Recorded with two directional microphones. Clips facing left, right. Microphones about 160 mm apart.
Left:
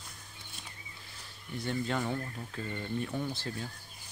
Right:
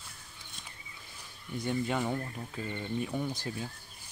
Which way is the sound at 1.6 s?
15° right (ahead or behind).